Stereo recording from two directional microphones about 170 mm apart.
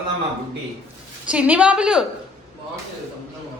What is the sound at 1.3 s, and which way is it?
Speech, 10° right (ahead or behind).